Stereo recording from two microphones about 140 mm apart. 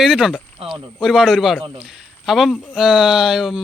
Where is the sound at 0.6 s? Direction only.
40° right (ahead or behind).